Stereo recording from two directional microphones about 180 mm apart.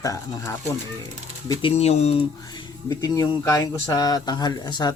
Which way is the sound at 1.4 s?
30° left (ahead or behind).